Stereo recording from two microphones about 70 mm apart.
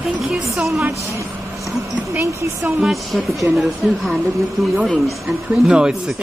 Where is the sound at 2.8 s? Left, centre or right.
Centre.